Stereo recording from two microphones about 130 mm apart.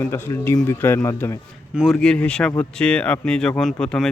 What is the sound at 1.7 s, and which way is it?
Speech, 5° right (ahead or behind).